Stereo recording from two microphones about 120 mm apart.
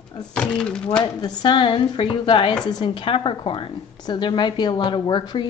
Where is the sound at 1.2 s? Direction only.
40° left (ahead or behind).